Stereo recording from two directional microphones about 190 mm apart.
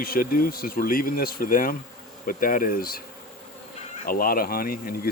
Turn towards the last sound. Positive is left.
turn(degrees=50)  # may be behind; listen again after turning